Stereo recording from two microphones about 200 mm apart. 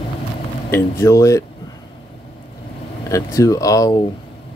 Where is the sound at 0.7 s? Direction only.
15° left (ahead or behind).